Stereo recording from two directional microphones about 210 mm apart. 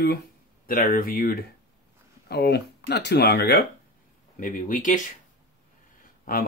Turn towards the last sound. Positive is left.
turn(degrees=45)  # may be behind; listen again after turning